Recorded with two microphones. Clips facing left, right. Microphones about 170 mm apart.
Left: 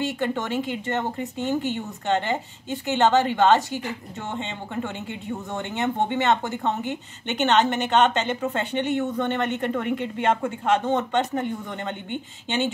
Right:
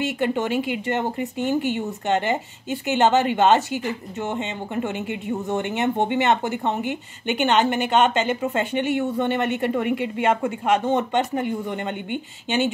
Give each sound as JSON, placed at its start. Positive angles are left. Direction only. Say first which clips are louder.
{"t": 0.0, "sound": "speech", "louder": "right 3 dB", "side_deg": -15}